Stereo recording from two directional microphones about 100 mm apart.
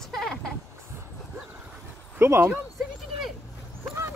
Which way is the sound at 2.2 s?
25° right (ahead or behind).